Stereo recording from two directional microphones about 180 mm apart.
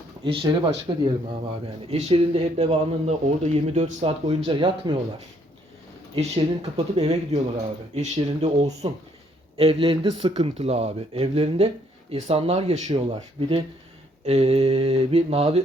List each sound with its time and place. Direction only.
0.3 s speech: 30° right (ahead or behind)
6.1 s speech: 35° right (ahead or behind)
14.3 s speech: 35° right (ahead or behind)